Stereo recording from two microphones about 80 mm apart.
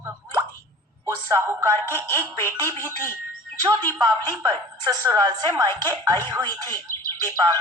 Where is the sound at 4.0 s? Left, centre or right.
Right.